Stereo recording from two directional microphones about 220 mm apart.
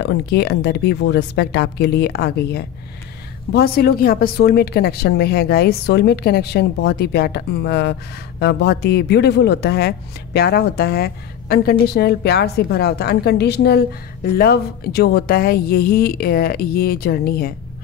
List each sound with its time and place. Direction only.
0.0 s a man's voice: 50° left (ahead or behind)